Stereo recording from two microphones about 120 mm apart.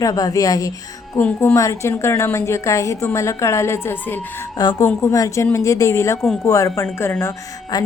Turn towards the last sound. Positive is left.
turn(degrees=25)  # may be behind; listen again after turning